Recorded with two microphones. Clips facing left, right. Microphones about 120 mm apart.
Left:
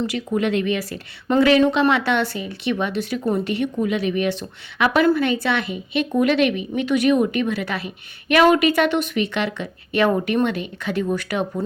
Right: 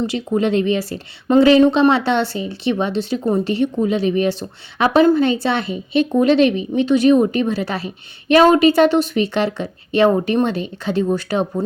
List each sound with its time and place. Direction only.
0.1 s a woman's voice: 30° right (ahead or behind)